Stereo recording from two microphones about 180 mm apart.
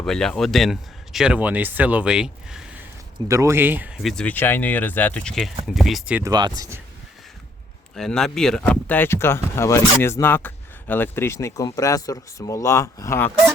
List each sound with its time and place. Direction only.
0.0 s speech: 5° left (ahead or behind)
3.2 s speech: 15° right (ahead or behind)
6.2 s speech: 20° right (ahead or behind)
7.9 s speech: centre (ahead or behind)